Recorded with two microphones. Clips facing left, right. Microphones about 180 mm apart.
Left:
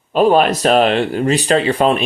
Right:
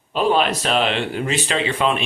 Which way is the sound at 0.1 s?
45° left (ahead or behind).